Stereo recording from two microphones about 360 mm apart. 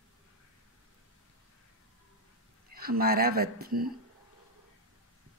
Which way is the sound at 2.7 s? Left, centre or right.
Right.